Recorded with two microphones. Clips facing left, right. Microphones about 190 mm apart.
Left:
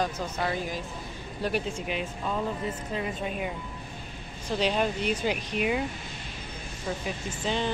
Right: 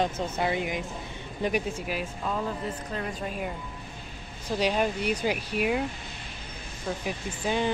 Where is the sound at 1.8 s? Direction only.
5° right (ahead or behind).